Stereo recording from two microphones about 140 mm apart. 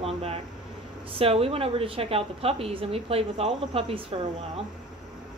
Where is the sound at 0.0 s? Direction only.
45° right (ahead or behind).